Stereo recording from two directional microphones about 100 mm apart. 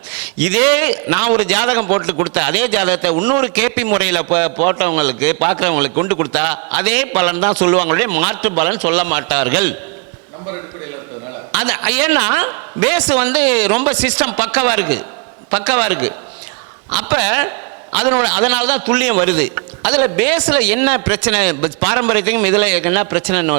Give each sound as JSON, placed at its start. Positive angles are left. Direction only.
{"t": 0.1, "sound": "a man's voice", "side_deg": -20}
{"t": 11.5, "sound": "a man's voice", "side_deg": -20}